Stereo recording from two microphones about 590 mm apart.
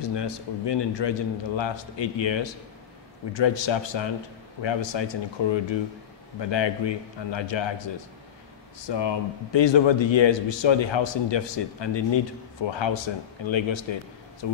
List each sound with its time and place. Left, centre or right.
0.0 s a man's voice: left